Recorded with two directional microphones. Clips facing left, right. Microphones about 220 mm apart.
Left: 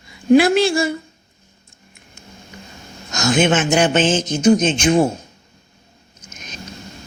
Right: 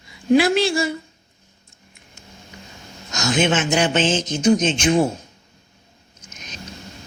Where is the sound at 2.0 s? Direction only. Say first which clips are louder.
Left 3 dB; 50° left (ahead or behind).